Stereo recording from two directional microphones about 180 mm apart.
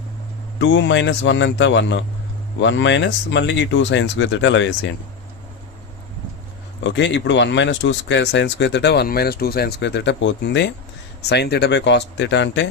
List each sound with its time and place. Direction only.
0.6 s speech: 90° left
6.8 s speech: 80° left
11.2 s speech: 65° left (ahead or behind)